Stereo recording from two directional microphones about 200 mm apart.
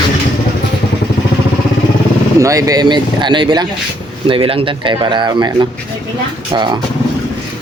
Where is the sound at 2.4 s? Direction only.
15° right (ahead or behind).